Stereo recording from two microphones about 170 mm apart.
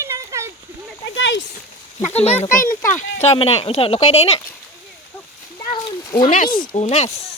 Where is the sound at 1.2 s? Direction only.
90° left.